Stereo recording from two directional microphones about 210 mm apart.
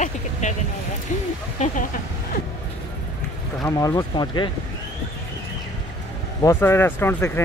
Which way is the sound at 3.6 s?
15° left (ahead or behind).